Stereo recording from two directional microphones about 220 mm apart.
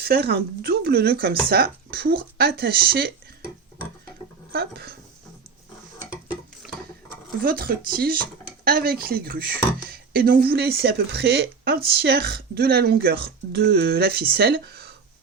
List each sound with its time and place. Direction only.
0.0 s speech: 45° right (ahead or behind)
4.5 s speech: 45° right (ahead or behind)
6.1 s dishes: 5° right (ahead or behind)
7.4 s speech: 40° right (ahead or behind)